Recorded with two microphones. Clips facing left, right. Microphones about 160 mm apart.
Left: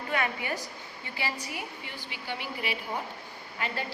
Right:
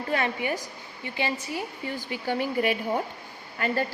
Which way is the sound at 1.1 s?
25° right (ahead or behind).